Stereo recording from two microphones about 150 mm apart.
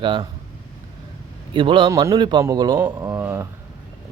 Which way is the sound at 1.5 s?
35° right (ahead or behind).